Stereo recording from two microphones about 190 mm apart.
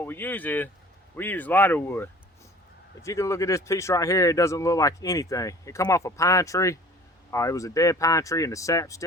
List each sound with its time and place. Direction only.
0.0 s speech: 10° left (ahead or behind)